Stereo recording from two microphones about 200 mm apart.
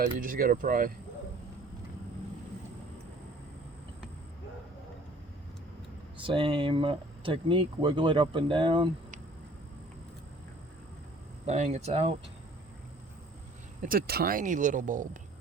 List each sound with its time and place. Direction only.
0.2 s speech: 45° right (ahead or behind)
6.1 s speech: 25° right (ahead or behind)
11.4 s speech: 35° right (ahead or behind)
13.8 s speech: 45° right (ahead or behind)